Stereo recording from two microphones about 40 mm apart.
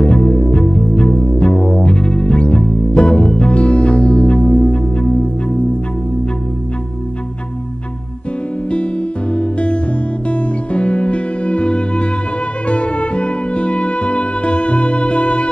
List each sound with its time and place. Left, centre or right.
0.0 s music: left
8.6 s music: left